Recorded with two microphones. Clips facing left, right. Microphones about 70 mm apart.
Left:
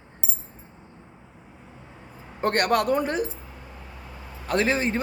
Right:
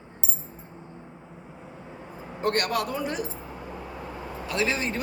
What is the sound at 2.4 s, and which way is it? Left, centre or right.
Speech, left.